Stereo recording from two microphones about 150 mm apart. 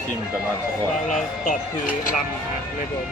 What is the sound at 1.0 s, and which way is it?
Speech, 55° left (ahead or behind).